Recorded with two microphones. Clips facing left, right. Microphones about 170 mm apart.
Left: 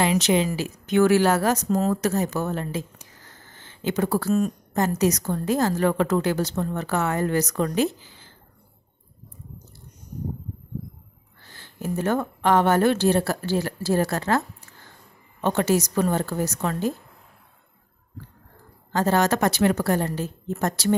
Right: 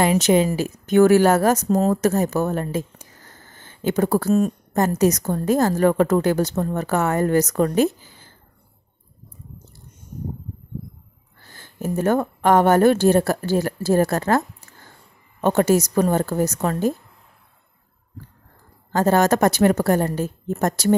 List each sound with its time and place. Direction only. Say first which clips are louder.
0.0 s a woman's voice: right 4 dB; 45° right (ahead or behind)
11.4 s a woman's voice: right 3 dB; 45° right (ahead or behind)
15.4 s a woman's voice: right 4 dB; 45° right (ahead or behind)
18.9 s a woman's voice: right 4 dB; 45° right (ahead or behind)